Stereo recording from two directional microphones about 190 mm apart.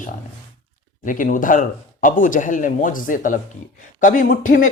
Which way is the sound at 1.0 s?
45° left (ahead or behind).